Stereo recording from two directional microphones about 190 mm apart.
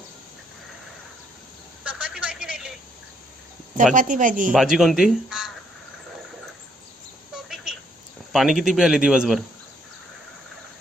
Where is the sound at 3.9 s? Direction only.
45° right (ahead or behind).